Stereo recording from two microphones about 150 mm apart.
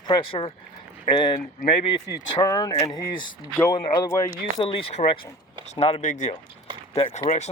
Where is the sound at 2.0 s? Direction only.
25° left (ahead or behind).